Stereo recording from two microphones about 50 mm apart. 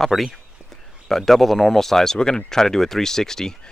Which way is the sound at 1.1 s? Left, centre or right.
Centre.